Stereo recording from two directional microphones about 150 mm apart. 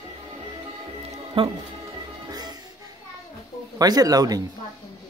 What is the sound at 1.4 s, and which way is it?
Speech, 35° right (ahead or behind).